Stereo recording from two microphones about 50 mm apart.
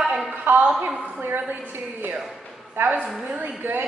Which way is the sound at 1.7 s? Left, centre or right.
Right.